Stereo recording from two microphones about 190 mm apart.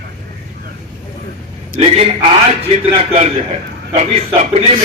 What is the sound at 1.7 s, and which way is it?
A man's voice, 35° right (ahead or behind).